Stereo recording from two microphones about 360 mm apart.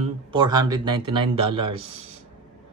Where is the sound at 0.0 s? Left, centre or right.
Centre.